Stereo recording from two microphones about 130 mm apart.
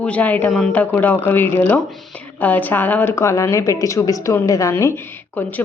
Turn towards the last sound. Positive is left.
turn(degrees=15)  # may be behind; listen again after turning